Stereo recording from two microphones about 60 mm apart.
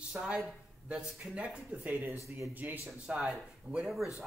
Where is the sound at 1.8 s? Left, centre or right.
Right.